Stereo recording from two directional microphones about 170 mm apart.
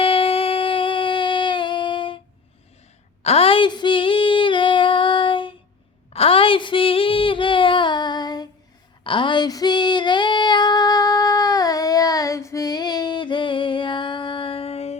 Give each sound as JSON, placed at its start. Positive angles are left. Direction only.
{"t": 0.0, "sound": "a sound", "side_deg": 35}
{"t": 3.2, "sound": "female singing", "side_deg": 35}
{"t": 6.1, "sound": "child singing", "side_deg": 35}
{"t": 9.0, "sound": "female singing", "side_deg": 30}